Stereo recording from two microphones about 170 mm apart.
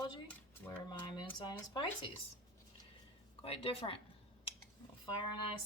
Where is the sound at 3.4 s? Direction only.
35° left (ahead or behind).